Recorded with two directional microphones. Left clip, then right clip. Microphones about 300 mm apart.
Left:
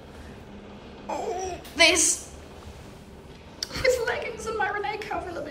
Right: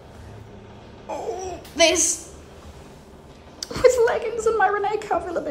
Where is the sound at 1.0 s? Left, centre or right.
Centre.